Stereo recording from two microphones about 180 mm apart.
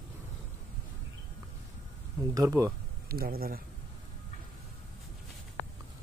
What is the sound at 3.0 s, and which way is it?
Speech, 55° right (ahead or behind).